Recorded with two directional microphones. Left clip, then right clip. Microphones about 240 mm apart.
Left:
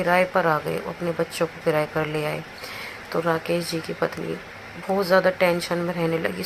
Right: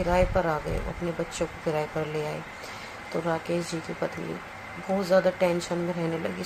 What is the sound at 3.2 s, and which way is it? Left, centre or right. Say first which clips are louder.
Speech: left 5 dB; centre.